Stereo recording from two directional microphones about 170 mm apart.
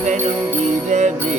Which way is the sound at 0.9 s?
45° right (ahead or behind).